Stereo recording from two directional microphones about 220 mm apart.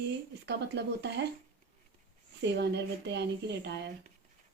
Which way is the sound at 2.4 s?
50° right (ahead or behind).